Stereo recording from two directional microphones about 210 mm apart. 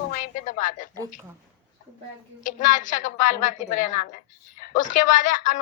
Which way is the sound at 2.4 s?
35° left (ahead or behind).